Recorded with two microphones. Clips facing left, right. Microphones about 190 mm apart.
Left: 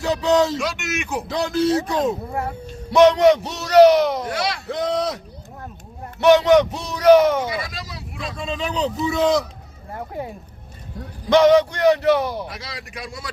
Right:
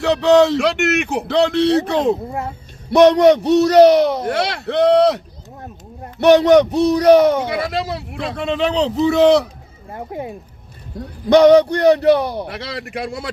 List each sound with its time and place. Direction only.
0.0 s speech: 65° right (ahead or behind)
3.6 s speech: 35° right (ahead or behind)
4.2 s speech: 60° right (ahead or behind)
6.3 s speech: 35° right (ahead or behind)
7.4 s speech: 60° right (ahead or behind)
9.9 s speech: 20° right (ahead or behind)
11.3 s speech: 35° right (ahead or behind)
12.3 s speech: 65° right (ahead or behind)